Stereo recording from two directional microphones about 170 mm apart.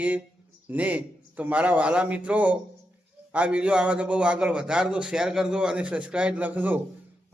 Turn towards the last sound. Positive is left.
turn(degrees=-10)  # may be behind; listen again after turning